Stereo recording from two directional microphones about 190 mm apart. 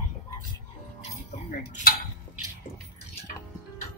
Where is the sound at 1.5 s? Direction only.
50° left (ahead or behind).